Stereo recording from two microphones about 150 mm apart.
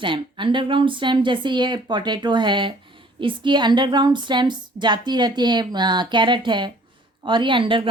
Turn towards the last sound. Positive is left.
turn(degrees=-35)  # may be behind; listen again after turning